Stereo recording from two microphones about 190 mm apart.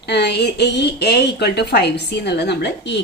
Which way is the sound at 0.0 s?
60° left (ahead or behind).